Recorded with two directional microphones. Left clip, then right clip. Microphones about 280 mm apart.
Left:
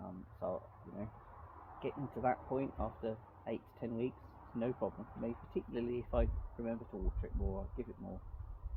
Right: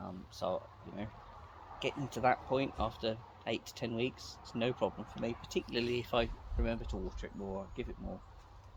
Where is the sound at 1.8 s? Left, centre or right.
Right.